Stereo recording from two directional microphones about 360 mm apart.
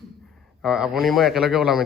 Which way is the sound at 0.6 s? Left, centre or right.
Centre.